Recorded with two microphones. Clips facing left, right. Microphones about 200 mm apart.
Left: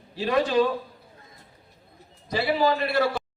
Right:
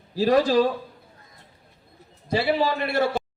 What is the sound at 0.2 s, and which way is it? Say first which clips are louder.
Speech: right 4 dB; 35° right (ahead or behind).